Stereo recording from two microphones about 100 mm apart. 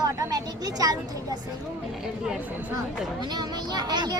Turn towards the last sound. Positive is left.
turn(degrees=-45)  # may be behind; listen again after turning